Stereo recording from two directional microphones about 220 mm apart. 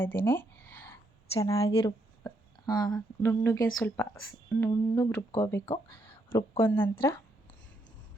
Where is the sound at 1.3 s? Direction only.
15° left (ahead or behind).